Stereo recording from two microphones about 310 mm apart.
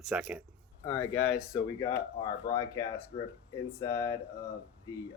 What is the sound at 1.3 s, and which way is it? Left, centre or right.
Speech, centre.